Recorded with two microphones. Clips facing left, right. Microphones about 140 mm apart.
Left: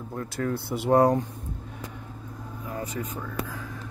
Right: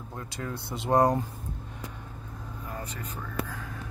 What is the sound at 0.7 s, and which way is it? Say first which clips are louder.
Speech: left 3 dB; 5° left (ahead or behind).